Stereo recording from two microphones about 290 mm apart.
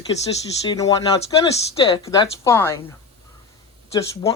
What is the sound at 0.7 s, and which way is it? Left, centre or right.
Speech, centre.